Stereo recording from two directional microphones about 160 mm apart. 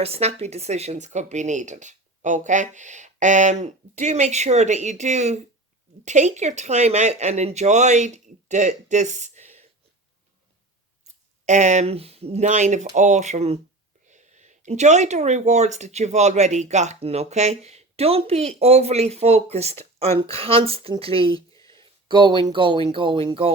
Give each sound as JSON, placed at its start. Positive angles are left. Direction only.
{"t": 0.0, "sound": "speech", "side_deg": -40}
{"t": 11.4, "sound": "speech", "side_deg": -45}